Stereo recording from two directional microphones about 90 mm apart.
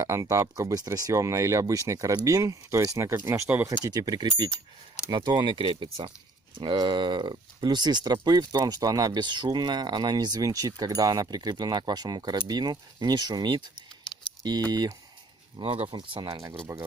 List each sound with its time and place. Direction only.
0.0 s speech: 35° right (ahead or behind)
3.8 s speech: 45° right (ahead or behind); by 6.1 s 70° right (ahead or behind)
6.6 s speech: 60° right (ahead or behind)
14.7 s speech: 50° right (ahead or behind)
15.6 s speech: 90° right
16.0 s speech: 65° right (ahead or behind)